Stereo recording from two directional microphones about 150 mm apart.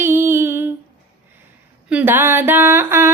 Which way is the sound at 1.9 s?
10° right (ahead or behind).